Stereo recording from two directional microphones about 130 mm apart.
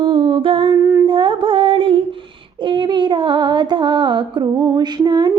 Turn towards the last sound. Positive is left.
turn(degrees=-35)  # may be behind; listen again after turning